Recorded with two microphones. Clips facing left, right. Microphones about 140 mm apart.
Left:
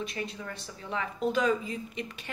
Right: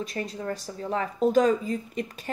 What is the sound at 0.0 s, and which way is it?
Speech, 40° right (ahead or behind).